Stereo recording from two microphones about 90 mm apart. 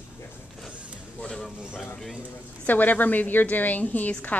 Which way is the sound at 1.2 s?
5° left (ahead or behind).